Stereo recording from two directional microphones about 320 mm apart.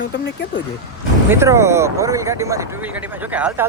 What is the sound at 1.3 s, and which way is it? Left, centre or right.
Speech, centre.